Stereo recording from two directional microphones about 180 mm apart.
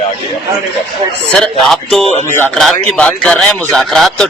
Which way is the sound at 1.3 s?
Centre (ahead or behind).